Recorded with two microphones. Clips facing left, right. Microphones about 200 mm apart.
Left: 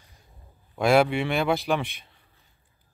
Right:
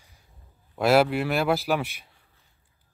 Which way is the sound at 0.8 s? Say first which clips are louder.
Even; 5° right (ahead or behind).